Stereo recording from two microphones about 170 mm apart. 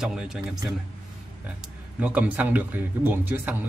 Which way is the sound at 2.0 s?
10° right (ahead or behind).